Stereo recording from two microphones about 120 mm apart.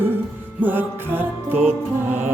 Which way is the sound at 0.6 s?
15° right (ahead or behind).